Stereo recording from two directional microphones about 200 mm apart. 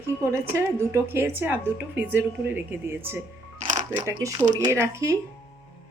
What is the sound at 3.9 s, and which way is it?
A woman's voice, 15° right (ahead or behind).